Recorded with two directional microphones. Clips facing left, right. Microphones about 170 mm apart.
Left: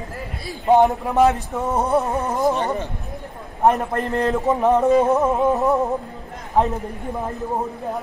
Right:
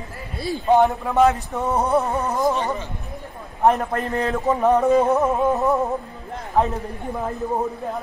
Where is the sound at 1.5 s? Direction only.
Centre (ahead or behind).